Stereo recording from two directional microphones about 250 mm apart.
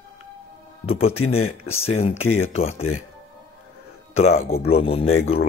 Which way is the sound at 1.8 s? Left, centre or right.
Left.